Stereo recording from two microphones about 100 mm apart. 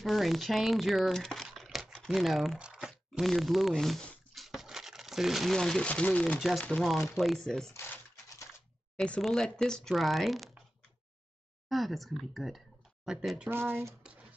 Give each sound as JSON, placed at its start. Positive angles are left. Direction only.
{"t": 0.0, "sound": "speech", "side_deg": 0}
{"t": 6.6, "sound": "speech", "side_deg": 5}
{"t": 7.7, "sound": "typewriter", "side_deg": 25}
{"t": 8.9, "sound": "speech", "side_deg": 10}
{"t": 11.7, "sound": "speech", "side_deg": 0}
{"t": 13.5, "sound": "speech", "side_deg": -25}